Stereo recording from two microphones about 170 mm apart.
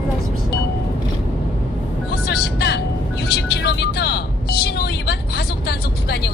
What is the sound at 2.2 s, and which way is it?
Vehicle, 70° left (ahead or behind).